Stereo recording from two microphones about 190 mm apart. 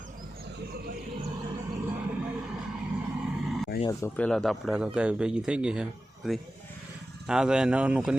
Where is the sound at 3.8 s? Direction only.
10° left (ahead or behind).